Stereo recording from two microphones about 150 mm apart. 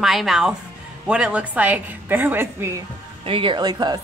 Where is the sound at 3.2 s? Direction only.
35° right (ahead or behind).